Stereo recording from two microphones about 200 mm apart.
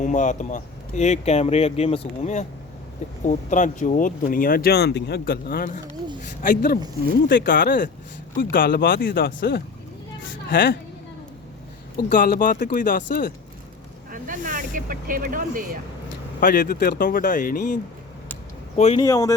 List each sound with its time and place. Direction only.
0.0 s speech: 40° left (ahead or behind)
11.9 s speech: 45° left (ahead or behind)
14.1 s speech: 40° right (ahead or behind)
16.4 s speech: 45° left (ahead or behind)
18.8 s speech: 30° left (ahead or behind)
19.0 s speech: 15° left (ahead or behind)